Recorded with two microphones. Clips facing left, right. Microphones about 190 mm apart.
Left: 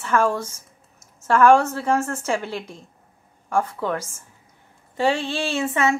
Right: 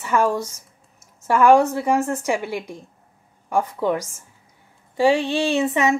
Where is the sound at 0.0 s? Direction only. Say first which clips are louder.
Right 1 dB; 15° right (ahead or behind).